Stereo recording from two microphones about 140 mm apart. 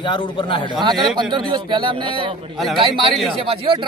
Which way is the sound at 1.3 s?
35° right (ahead or behind).